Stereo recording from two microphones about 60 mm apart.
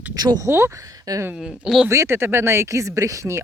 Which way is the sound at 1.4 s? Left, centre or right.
Centre.